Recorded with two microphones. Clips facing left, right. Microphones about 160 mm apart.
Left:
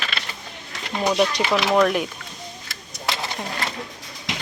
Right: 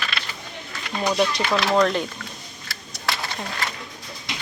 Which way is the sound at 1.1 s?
10° left (ahead or behind).